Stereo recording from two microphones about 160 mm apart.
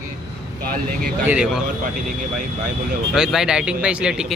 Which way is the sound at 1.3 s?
5° right (ahead or behind).